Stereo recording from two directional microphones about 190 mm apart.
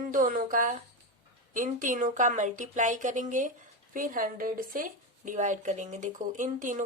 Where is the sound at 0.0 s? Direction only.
45° right (ahead or behind).